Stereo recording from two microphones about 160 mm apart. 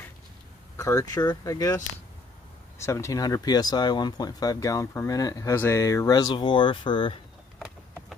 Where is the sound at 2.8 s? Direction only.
20° left (ahead or behind).